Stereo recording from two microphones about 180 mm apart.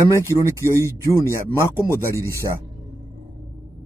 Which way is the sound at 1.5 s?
15° left (ahead or behind).